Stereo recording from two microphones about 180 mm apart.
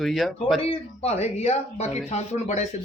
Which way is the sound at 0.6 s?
35° left (ahead or behind).